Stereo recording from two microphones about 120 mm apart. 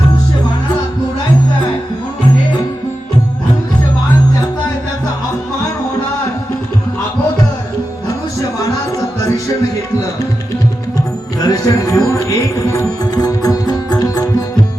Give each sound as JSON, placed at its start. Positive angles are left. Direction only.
{"t": 11.3, "sound": "music", "side_deg": 30}